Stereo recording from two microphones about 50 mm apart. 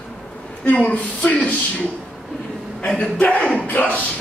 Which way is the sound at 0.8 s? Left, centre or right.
Left.